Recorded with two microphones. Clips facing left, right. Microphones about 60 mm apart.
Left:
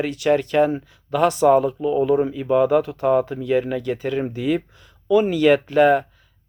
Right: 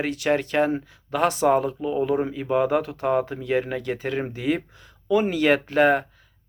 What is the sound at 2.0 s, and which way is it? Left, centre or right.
Speech, right.